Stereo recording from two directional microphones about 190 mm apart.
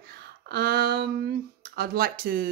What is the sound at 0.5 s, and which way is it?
Speech, 55° right (ahead or behind).